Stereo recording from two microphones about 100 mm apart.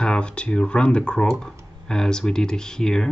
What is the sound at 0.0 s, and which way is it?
Speech, 10° left (ahead or behind).